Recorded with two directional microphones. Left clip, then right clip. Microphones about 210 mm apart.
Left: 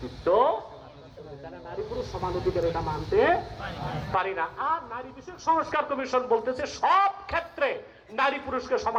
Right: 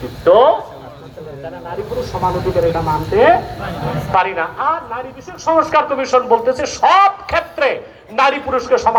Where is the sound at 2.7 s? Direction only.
40° right (ahead or behind).